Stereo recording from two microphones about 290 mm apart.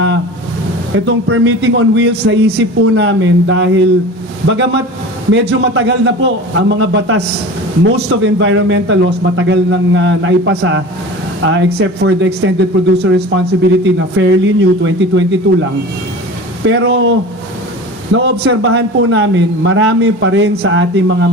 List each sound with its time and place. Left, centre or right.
0.9 s speech: right
16.6 s speech: right